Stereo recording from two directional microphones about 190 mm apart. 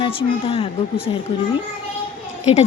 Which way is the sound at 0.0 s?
30° left (ahead or behind).